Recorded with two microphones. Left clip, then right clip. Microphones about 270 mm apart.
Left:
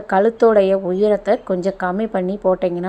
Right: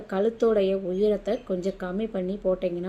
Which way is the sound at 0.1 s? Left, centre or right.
Left.